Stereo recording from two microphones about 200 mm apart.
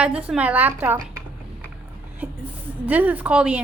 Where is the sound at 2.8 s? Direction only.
10° right (ahead or behind).